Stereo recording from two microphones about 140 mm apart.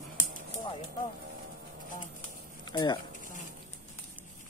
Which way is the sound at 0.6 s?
30° left (ahead or behind).